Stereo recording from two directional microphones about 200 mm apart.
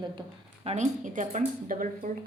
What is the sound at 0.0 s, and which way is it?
Speech, 25° right (ahead or behind).